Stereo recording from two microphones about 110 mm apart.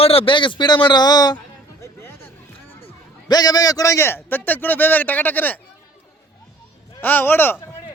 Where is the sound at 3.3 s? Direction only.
35° left (ahead or behind); by 5.6 s 15° left (ahead or behind).